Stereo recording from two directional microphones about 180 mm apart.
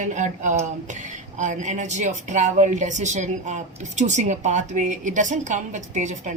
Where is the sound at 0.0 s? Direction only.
45° right (ahead or behind).